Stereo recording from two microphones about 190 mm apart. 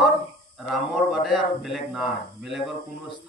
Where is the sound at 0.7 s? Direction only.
Centre (ahead or behind).